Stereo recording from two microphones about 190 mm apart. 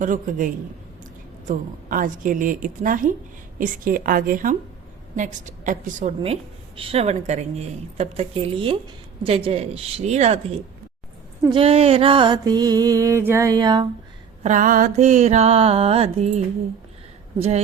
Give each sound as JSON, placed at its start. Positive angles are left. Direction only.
{"t": 0.0, "sound": "a woman's voice", "side_deg": -45}
{"t": 11.4, "sound": "music", "side_deg": -30}
{"t": 14.4, "sound": "a woman's voice", "side_deg": -45}